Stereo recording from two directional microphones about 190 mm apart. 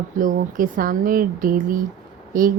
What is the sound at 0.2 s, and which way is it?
A woman's voice, 45° right (ahead or behind).